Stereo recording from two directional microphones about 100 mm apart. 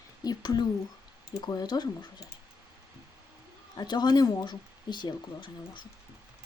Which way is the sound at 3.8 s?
45° left (ahead or behind).